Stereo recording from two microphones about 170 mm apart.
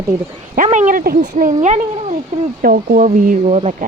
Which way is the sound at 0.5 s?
45° right (ahead or behind).